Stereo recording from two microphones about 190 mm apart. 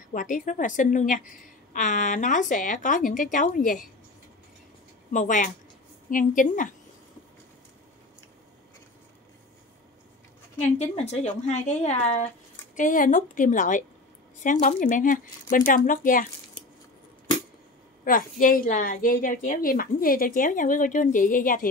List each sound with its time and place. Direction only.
0.1 s a woman's voice: 45° left (ahead or behind)
5.1 s a woman's voice: 40° left (ahead or behind)
10.8 s a woman's voice: 35° left (ahead or behind)
18.0 s a woman's voice: 45° left (ahead or behind)